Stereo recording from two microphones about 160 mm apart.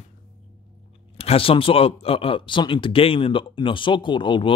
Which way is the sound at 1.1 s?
40° left (ahead or behind).